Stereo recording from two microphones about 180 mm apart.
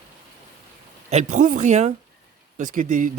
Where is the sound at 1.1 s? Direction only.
40° right (ahead or behind).